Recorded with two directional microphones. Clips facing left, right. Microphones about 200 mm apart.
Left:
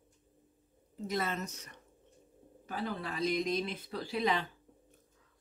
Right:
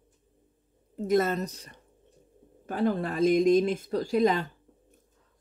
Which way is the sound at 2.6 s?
50° right (ahead or behind).